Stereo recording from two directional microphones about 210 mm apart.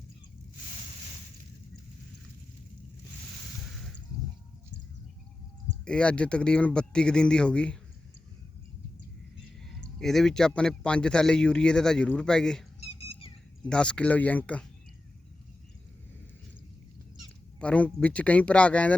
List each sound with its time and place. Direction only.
3.6 s a sound: centre (ahead or behind)
5.8 s speech: 5° left (ahead or behind)
10.0 s speech: centre (ahead or behind)
13.0 s a sound: 30° left (ahead or behind)
13.7 s speech: 5° left (ahead or behind)
17.6 s speech: 5° left (ahead or behind)